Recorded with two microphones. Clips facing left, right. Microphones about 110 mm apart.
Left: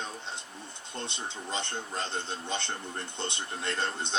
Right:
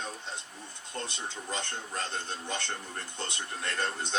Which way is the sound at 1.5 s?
25° left (ahead or behind).